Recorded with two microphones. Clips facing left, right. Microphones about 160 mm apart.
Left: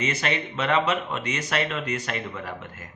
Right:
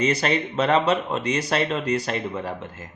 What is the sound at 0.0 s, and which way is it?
Speech, 35° right (ahead or behind).